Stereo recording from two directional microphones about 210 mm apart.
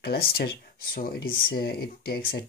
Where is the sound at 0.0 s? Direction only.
50° left (ahead or behind).